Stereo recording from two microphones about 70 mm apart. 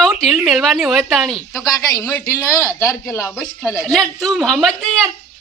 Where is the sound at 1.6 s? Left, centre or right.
Left.